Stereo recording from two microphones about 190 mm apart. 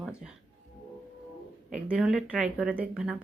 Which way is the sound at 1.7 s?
5° right (ahead or behind).